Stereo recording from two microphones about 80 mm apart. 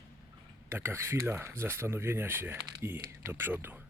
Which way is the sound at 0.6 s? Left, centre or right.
Right.